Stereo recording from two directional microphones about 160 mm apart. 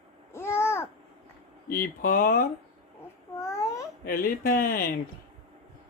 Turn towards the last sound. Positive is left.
turn(degrees=65)  # may be behind; listen again after turning